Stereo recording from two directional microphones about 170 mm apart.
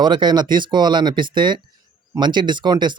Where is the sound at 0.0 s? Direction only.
25° right (ahead or behind).